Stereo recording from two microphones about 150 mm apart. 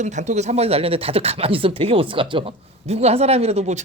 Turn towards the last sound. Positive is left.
turn(degrees=-45)  # may be behind; listen again after turning